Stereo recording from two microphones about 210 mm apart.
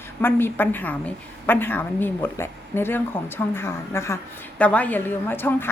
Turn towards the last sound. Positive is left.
turn(degrees=10)  # may be behind; listen again after turning